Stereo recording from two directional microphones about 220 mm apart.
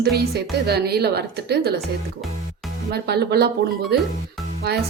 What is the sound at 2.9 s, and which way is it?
Speech, 45° right (ahead or behind).